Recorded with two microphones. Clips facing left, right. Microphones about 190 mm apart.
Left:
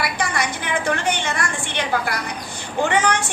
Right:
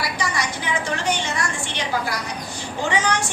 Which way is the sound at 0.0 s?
55° left (ahead or behind).